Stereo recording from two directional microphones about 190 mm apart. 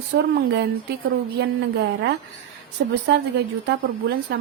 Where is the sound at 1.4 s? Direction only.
60° right (ahead or behind).